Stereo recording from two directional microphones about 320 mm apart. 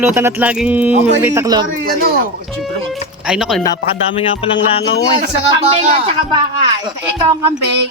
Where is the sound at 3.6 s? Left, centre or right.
Centre.